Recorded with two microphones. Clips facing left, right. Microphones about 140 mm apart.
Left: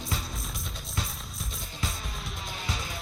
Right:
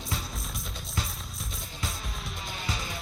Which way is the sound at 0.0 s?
Centre (ahead or behind).